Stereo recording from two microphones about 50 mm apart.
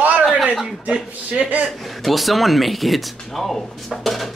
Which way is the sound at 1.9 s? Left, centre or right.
Centre.